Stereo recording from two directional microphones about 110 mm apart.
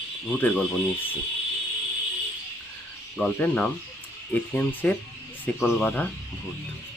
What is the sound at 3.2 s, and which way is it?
Speech, 10° left (ahead or behind).